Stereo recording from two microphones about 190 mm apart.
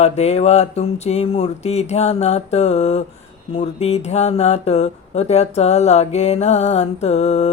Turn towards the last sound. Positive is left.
turn(degrees=35)  # may be behind; listen again after turning